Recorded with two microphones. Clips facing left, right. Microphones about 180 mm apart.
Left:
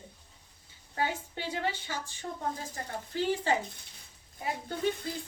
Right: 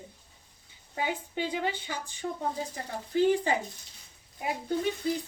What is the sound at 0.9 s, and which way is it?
A woman's voice, 15° right (ahead or behind).